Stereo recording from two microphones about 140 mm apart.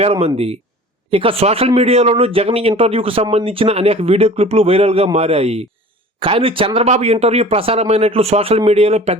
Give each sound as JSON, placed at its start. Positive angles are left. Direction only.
{"t": 0.0, "sound": "speech", "side_deg": -45}